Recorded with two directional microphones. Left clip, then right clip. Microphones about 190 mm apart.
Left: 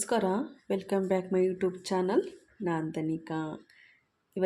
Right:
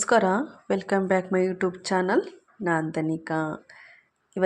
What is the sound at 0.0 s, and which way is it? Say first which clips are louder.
A woman's voice: right 8 dB; 10° right (ahead or behind).